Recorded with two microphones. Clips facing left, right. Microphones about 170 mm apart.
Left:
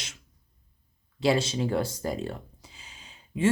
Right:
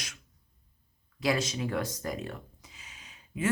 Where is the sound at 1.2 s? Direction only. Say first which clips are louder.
Left 5 dB; 30° left (ahead or behind).